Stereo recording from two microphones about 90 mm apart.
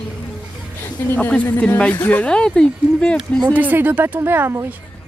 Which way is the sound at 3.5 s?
20° right (ahead or behind).